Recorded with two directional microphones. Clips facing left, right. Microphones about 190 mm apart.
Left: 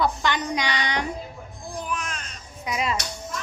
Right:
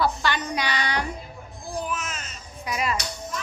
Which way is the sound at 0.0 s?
20° left (ahead or behind).